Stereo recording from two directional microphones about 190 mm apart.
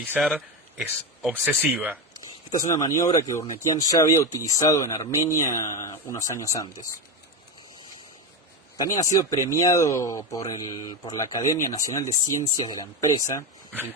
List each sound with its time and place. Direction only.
0.0 s speech: 5° right (ahead or behind)
2.5 s speech: 20° left (ahead or behind)
8.8 s speech: 20° left (ahead or behind)